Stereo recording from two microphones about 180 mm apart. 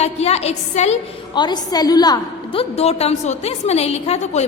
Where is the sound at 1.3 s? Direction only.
25° left (ahead or behind).